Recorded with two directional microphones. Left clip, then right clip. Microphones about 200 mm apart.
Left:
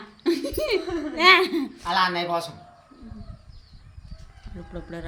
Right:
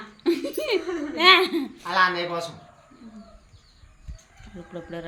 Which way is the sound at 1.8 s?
45° left (ahead or behind).